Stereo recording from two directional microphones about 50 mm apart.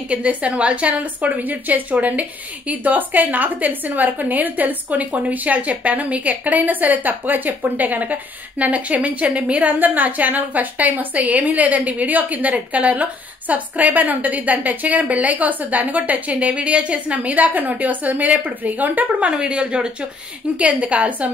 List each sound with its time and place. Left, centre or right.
0.1 s a woman's voice: right
19.2 s a woman's voice: right